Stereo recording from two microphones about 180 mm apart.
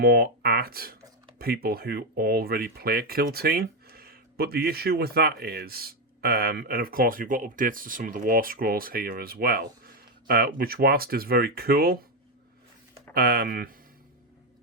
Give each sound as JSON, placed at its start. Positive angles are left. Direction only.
{"t": 0.0, "sound": "speech", "side_deg": -60}
{"t": 13.1, "sound": "speech", "side_deg": -55}